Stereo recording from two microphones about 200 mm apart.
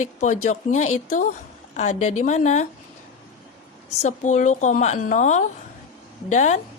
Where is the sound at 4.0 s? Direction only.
35° left (ahead or behind).